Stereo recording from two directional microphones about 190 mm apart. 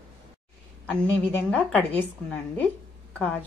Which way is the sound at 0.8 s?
5° left (ahead or behind).